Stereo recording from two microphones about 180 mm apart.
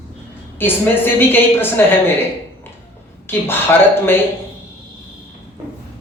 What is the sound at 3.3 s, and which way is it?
Speech, 10° left (ahead or behind).